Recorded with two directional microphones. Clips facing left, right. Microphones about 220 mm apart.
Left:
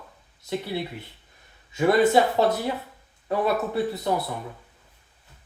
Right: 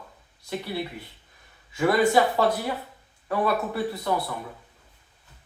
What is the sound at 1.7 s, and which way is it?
Speech, 25° left (ahead or behind).